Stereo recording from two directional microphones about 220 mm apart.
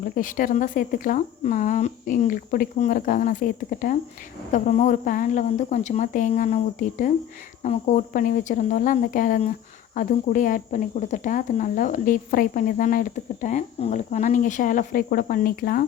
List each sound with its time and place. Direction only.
0.2 s speech: 35° left (ahead or behind)